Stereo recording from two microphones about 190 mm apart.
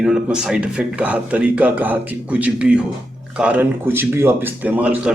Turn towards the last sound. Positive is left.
turn(degrees=-5)  # may be behind; listen again after turning